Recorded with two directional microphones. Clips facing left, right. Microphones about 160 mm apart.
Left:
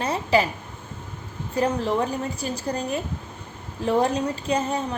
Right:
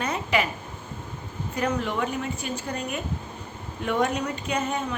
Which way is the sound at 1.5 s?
30° left (ahead or behind).